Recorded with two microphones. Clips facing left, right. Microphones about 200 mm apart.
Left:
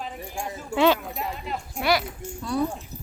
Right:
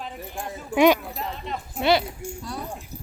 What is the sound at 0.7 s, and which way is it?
Speech, 15° right (ahead or behind).